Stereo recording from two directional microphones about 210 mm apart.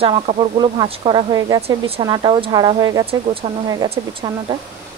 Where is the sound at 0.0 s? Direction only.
25° right (ahead or behind).